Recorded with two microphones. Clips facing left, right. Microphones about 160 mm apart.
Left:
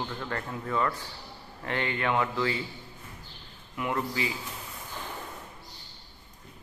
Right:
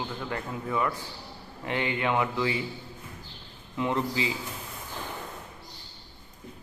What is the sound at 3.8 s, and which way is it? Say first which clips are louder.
Speech: right 3 dB; 20° right (ahead or behind).